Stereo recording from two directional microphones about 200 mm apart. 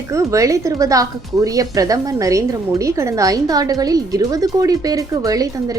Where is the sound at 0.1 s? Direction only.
15° right (ahead or behind).